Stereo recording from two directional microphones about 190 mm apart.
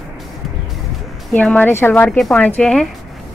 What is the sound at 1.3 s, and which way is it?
Speech, 10° left (ahead or behind).